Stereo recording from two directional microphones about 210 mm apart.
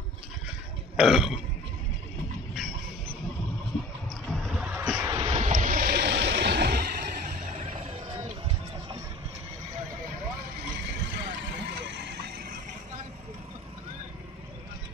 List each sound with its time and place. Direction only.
0.9 s burping: centre (ahead or behind)
4.3 s a sound: centre (ahead or behind)
5.0 s vehicle: 20° right (ahead or behind)
5.3 s vehicle: 35° right (ahead or behind)
11.1 s vehicle: 60° right (ahead or behind)